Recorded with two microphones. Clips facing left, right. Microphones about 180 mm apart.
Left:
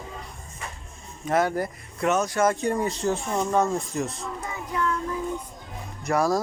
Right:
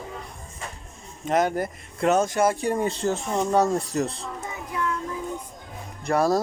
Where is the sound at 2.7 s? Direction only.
25° right (ahead or behind).